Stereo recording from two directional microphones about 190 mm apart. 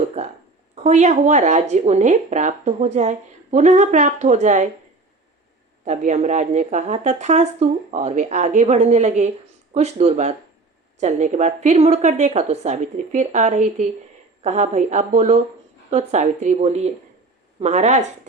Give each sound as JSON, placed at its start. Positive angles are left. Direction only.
{"t": 0.2, "sound": "a sound", "side_deg": -35}
{"t": 0.9, "sound": "speech", "side_deg": -40}
{"t": 5.8, "sound": "speech", "side_deg": -40}